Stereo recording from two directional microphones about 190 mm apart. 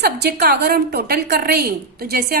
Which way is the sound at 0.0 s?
60° right (ahead or behind).